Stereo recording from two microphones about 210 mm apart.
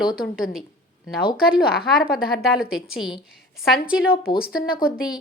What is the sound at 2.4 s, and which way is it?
A woman's voice, 5° right (ahead or behind).